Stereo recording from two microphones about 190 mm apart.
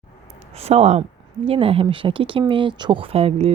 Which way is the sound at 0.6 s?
35° right (ahead or behind).